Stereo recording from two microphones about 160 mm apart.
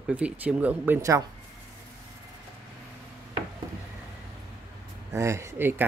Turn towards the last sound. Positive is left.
turn(degrees=-15)  # may be behind; listen again after turning